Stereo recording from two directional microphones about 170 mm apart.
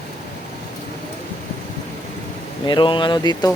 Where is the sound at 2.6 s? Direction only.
25° left (ahead or behind).